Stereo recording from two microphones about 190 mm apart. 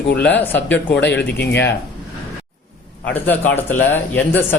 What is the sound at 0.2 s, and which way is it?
Speech, 10° left (ahead or behind).